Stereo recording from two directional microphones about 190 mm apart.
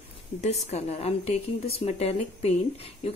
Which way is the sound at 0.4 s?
35° left (ahead or behind).